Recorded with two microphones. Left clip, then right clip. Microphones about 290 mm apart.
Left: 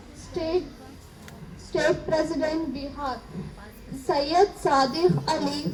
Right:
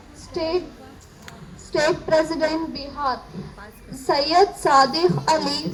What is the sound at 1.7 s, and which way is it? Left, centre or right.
Speech, right.